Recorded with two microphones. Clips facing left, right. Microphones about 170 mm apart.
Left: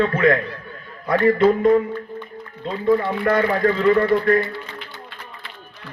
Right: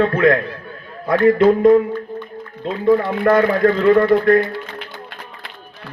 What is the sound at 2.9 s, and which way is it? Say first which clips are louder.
Speech: right 4 dB; 45° right (ahead or behind).